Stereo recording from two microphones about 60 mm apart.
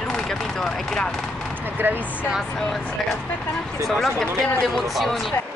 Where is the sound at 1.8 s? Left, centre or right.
Right.